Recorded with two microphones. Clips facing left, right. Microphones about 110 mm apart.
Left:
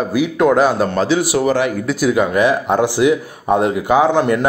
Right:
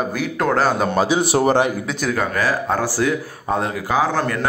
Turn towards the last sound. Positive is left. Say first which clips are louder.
# left 6 dB
turn(degrees=20)  # may be behind; listen again after turning